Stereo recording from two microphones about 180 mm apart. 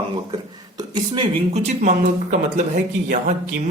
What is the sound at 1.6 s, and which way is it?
Speech, 40° right (ahead or behind).